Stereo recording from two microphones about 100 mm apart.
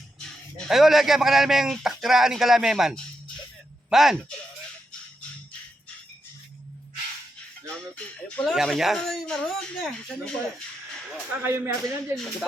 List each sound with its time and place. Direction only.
0.7 s speech: 5° right (ahead or behind)
8.4 s speech: centre (ahead or behind)
11.3 s speech: 20° right (ahead or behind)